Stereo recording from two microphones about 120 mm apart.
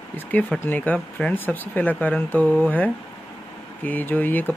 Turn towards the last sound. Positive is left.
turn(degrees=15)  # may be behind; listen again after turning